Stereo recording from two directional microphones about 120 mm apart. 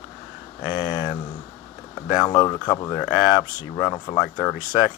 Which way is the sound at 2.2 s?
35° left (ahead or behind).